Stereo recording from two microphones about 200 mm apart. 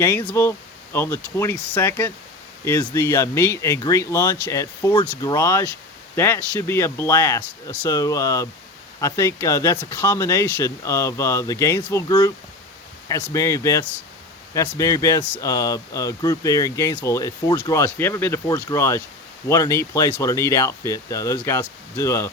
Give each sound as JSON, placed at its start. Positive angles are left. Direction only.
{"t": 0.0, "sound": "speech", "side_deg": 10}